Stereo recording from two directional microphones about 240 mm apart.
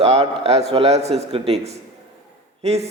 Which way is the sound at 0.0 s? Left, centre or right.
Right.